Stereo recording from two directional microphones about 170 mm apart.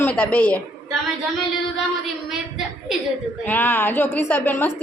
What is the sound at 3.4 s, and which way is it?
A woman's voice, 10° left (ahead or behind).